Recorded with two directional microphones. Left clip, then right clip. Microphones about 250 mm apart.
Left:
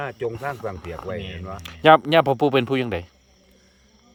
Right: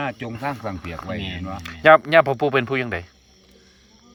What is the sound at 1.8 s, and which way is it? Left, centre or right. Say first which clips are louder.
Speech: right 1 dB; left.